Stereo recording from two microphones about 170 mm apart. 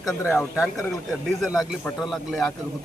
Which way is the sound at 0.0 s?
15° left (ahead or behind).